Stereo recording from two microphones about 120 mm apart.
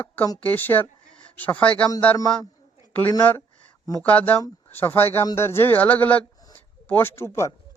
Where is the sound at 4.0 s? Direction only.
10° left (ahead or behind).